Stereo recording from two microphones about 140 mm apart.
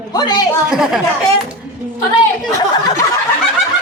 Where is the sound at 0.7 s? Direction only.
5° right (ahead or behind).